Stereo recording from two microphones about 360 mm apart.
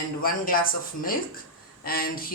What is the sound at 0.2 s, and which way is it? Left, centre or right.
Speech, left.